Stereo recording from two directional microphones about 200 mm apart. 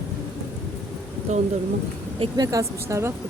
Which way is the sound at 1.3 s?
35° right (ahead or behind).